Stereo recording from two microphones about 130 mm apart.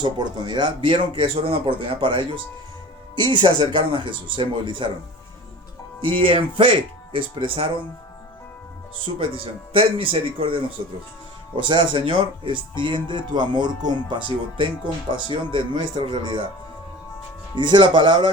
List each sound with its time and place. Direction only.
0.0 s speech: 35° right (ahead or behind)
6.1 s speech: 40° right (ahead or behind)
9.1 s speech: 40° right (ahead or behind)
15.5 s speech: 40° right (ahead or behind)
17.5 s speech: 35° right (ahead or behind)